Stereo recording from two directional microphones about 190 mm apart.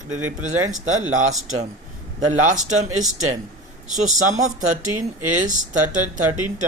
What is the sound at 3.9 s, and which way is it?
Speech, 40° right (ahead or behind).